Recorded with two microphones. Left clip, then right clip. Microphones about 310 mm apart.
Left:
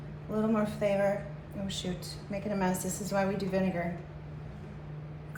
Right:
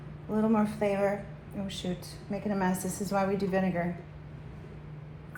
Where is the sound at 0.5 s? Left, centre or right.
Right.